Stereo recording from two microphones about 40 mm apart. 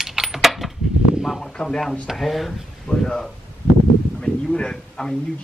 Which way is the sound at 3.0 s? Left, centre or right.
Centre.